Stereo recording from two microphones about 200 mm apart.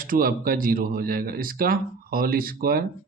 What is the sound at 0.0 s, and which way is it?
Speech, 45° right (ahead or behind).